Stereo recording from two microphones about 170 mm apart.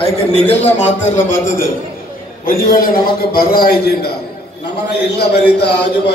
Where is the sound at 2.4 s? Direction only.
60° left (ahead or behind).